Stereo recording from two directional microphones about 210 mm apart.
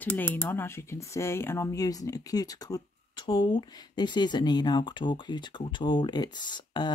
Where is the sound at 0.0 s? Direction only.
10° left (ahead or behind).